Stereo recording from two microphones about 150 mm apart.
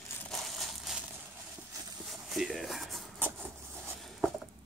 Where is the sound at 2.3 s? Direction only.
Centre (ahead or behind).